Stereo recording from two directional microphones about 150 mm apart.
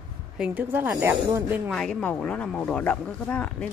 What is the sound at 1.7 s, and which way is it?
Speech, 5° left (ahead or behind).